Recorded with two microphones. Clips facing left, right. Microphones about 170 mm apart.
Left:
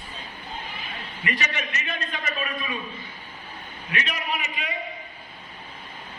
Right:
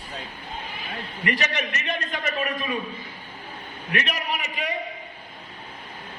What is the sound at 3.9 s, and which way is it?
Speech, 55° right (ahead or behind).